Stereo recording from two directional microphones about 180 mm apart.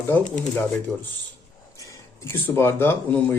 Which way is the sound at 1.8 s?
15° left (ahead or behind).